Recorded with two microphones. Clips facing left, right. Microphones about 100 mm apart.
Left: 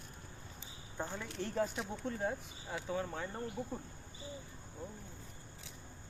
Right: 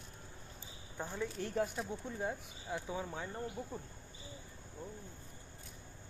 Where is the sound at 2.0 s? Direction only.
55° left (ahead or behind).